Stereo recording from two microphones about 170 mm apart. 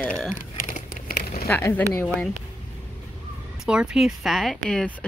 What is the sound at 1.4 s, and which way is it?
Speech, 15° left (ahead or behind).